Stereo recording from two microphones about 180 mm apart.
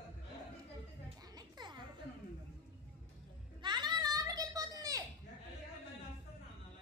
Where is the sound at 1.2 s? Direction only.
20° right (ahead or behind).